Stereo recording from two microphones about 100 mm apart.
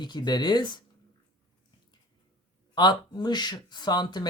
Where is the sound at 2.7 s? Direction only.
45° left (ahead or behind).